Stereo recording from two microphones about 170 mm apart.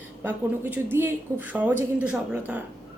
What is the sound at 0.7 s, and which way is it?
Speech, 15° right (ahead or behind).